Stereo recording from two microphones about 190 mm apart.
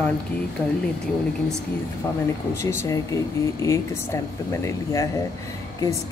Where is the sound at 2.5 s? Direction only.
15° left (ahead or behind).